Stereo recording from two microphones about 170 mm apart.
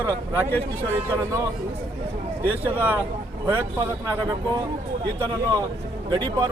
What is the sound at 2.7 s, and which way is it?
Speech, 10° right (ahead or behind).